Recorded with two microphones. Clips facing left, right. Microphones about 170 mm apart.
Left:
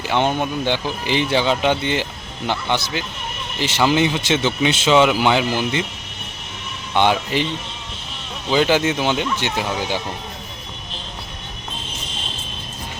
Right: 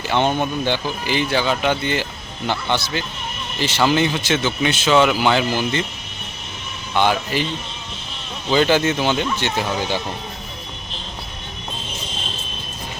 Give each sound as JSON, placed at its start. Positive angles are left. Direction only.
{"t": 0.1, "sound": "speech", "side_deg": 10}
{"t": 6.9, "sound": "speech", "side_deg": 20}
{"t": 8.4, "sound": "speech", "side_deg": 10}